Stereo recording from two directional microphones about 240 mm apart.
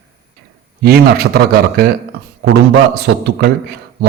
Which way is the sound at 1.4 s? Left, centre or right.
Right.